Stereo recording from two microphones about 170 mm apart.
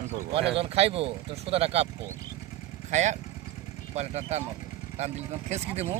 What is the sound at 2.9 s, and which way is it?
Speech, 45° right (ahead or behind).